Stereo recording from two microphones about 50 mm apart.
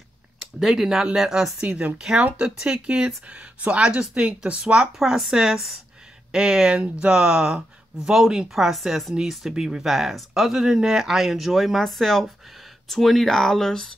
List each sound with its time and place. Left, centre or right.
0.4 s speech: centre
1.6 s speech: right
3.3 s speech: right; by 13.9 s centre